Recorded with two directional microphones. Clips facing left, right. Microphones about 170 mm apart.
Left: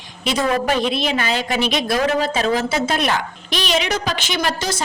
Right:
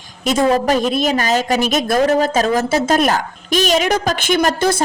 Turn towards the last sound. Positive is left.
turn(degrees=-55)  # may be behind; listen again after turning